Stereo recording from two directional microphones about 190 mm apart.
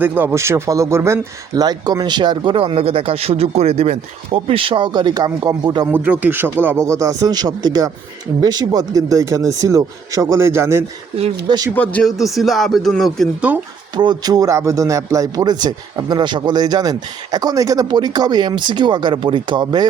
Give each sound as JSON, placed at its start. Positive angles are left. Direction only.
{"t": 0.0, "sound": "speech", "side_deg": -10}
{"t": 11.7, "sound": "speech", "side_deg": 10}
{"t": 13.9, "sound": "speech", "side_deg": -25}